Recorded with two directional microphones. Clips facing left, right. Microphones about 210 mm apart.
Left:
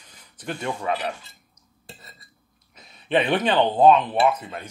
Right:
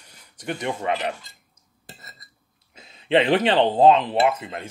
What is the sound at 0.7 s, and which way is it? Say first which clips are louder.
Speech: right 1 dB; 25° right (ahead or behind).